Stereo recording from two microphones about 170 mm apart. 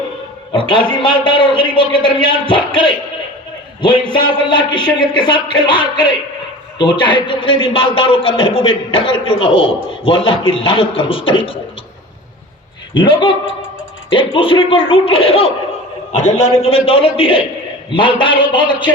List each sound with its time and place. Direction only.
0.5 s a man's voice: 30° left (ahead or behind)
12.9 s a man's voice: 30° left (ahead or behind)